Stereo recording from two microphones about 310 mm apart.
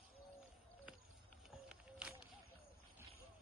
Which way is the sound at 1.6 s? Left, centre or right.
Centre.